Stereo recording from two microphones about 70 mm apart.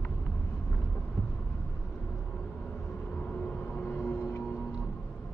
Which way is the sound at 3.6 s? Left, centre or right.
Left.